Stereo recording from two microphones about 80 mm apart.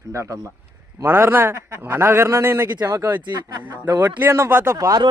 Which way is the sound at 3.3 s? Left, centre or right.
Right.